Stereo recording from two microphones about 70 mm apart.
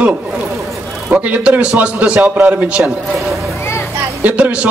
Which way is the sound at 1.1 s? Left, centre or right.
Right.